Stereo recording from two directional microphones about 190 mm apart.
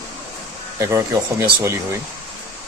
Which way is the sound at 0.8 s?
15° right (ahead or behind).